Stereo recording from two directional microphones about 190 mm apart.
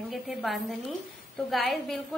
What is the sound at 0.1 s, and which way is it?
A woman's voice, centre (ahead or behind).